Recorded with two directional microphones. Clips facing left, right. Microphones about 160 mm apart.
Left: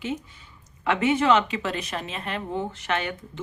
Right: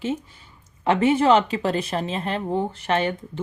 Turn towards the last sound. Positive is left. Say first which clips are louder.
# right 5 dB
turn(degrees=-30)  # may be behind; listen again after turning